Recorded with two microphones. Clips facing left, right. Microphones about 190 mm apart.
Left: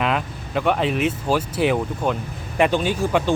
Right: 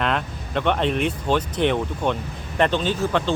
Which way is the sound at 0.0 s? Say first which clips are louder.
Left 1 dB; 5° left (ahead or behind).